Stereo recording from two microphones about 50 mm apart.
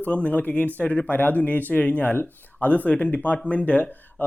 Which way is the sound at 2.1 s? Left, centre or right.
Left.